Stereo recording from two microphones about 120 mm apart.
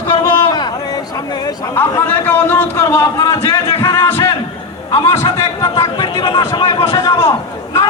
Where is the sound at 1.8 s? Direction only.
15° left (ahead or behind).